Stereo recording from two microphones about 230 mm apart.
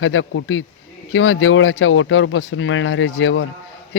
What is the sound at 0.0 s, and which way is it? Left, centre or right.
Speech, left.